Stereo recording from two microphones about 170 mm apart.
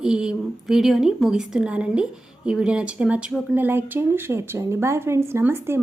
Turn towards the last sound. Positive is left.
turn(degrees=-15)  # may be behind; listen again after turning